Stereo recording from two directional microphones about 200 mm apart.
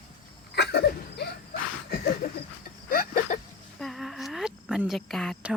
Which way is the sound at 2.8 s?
45° left (ahead or behind).